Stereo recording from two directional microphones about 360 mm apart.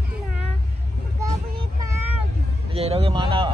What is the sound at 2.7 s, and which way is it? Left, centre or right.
Speech, centre.